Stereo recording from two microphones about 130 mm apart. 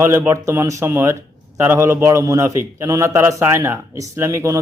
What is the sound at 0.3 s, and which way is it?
A man's voice, 20° right (ahead or behind).